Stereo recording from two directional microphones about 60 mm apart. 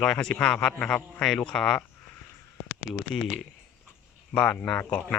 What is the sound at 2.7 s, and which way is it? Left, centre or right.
Speech, left.